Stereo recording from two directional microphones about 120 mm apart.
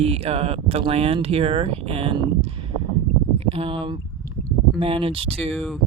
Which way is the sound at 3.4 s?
55° right (ahead or behind).